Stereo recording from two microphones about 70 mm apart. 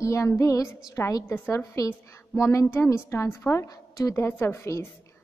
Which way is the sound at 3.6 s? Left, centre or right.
Left.